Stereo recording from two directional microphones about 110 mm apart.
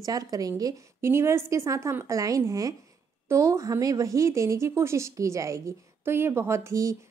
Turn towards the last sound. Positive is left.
turn(degrees=-30)  # may be behind; listen again after turning